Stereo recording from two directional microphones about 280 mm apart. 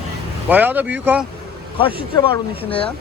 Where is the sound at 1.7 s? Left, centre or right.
Centre.